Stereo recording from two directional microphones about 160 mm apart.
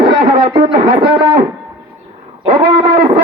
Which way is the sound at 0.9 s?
30° right (ahead or behind).